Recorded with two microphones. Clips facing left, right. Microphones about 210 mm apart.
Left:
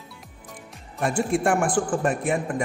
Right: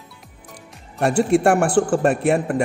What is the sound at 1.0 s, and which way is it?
A man's voice, 70° right (ahead or behind).